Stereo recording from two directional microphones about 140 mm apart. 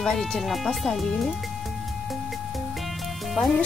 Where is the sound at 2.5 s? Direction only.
Centre (ahead or behind).